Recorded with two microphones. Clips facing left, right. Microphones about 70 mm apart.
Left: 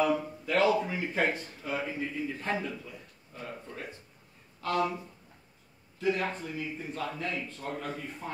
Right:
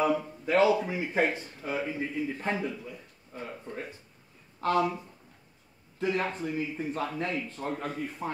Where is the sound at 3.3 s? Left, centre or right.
Right.